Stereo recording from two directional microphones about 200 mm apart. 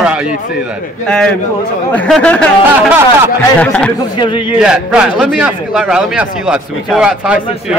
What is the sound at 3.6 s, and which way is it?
Speech, 5° left (ahead or behind).